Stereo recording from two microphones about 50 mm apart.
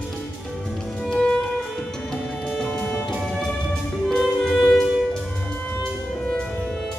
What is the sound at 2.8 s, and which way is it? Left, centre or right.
Music, left.